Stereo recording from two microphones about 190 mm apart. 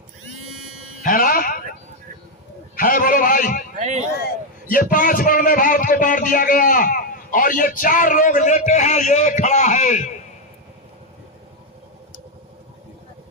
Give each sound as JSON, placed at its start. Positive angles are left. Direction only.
{"t": 1.0, "sound": "music", "side_deg": 45}
{"t": 2.7, "sound": "a man's voice", "side_deg": 45}
{"t": 3.8, "sound": "speech", "side_deg": -35}
{"t": 4.7, "sound": "a man's voice", "side_deg": 45}